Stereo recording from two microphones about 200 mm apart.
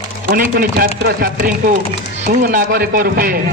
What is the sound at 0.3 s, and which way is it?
A man's voice, 45° right (ahead or behind).